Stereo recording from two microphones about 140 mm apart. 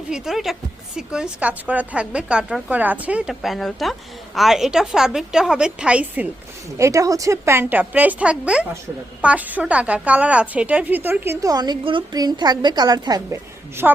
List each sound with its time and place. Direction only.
0.1 s a woman's voice: centre (ahead or behind)
6.7 s a woman's voice: 20° right (ahead or behind)
13.8 s a woman's voice: 5° right (ahead or behind)